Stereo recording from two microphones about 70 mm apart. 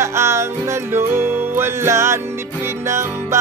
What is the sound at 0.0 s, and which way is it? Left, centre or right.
Music, right.